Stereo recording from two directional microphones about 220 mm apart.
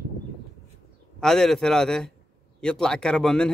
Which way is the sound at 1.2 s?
Centre (ahead or behind).